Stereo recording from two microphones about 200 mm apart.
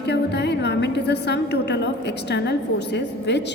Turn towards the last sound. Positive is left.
turn(degrees=60)  # may be behind; listen again after turning